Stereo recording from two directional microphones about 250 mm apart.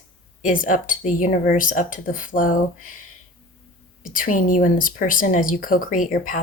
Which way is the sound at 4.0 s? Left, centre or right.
Left.